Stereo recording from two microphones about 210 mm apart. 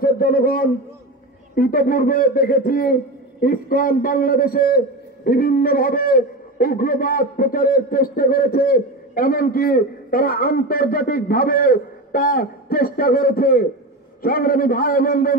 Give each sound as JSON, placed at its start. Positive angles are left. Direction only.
{"t": 0.0, "sound": "a man's voice", "side_deg": 45}